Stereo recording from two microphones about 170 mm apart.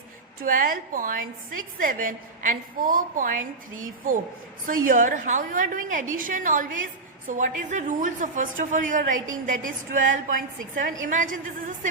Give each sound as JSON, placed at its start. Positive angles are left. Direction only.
{"t": 0.4, "sound": "a woman's voice", "side_deg": -55}